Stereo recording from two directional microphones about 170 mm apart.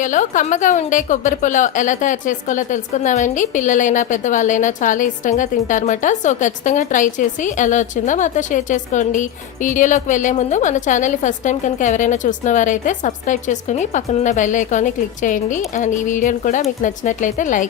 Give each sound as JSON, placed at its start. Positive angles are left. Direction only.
{"t": 0.0, "sound": "a woman's voice", "side_deg": 50}